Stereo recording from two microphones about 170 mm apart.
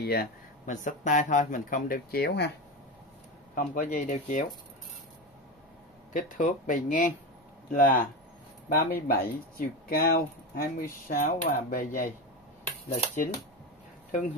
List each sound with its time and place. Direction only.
0.0 s speech: 70° left (ahead or behind)
0.7 s speech: 45° left (ahead or behind); by 2.5 s 75° left (ahead or behind)
3.5 s speech: 50° left (ahead or behind)
6.1 s speech: 50° left (ahead or behind)